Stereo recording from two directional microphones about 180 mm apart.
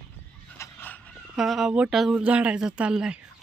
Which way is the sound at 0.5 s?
10° left (ahead or behind).